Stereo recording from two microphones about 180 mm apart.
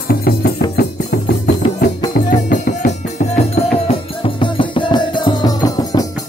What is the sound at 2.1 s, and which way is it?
Music, 55° left (ahead or behind).